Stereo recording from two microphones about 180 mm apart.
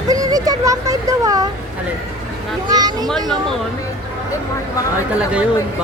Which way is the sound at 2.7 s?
20° right (ahead or behind).